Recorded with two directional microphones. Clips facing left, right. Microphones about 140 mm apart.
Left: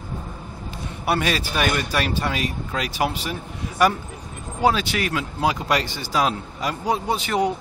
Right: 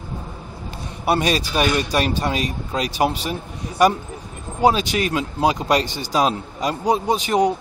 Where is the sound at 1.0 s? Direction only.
20° right (ahead or behind).